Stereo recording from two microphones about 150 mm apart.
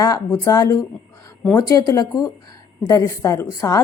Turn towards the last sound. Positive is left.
turn(degrees=20)  # may be behind; listen again after turning